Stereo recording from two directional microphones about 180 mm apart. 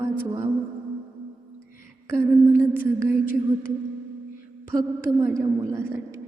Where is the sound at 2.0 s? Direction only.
15° right (ahead or behind).